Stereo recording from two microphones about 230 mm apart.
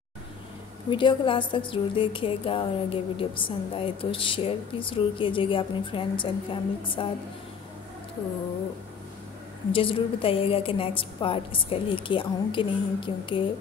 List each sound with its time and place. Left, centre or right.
0.8 s a woman's voice: left
9.7 s a woman's voice: left